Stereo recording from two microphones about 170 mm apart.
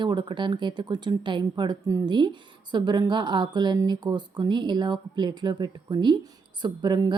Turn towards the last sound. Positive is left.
turn(degrees=-25)  # may be behind; listen again after turning